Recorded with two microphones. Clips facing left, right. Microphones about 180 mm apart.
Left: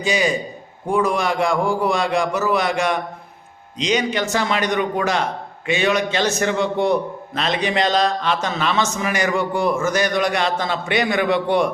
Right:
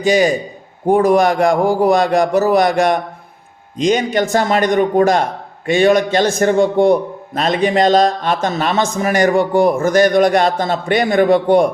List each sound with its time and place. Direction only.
0.1 s a man's voice: 45° right (ahead or behind)